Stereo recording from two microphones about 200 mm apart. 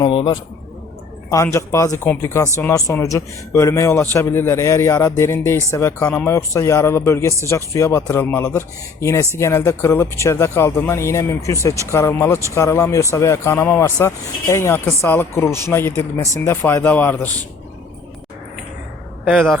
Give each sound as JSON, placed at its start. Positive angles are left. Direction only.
{"t": 0.0, "sound": "a man's voice", "side_deg": 25}
{"t": 19.3, "sound": "a man's voice", "side_deg": -5}